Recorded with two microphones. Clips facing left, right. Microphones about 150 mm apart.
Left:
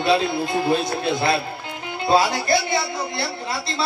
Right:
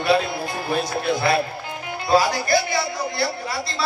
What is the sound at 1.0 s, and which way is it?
Speech, 25° left (ahead or behind).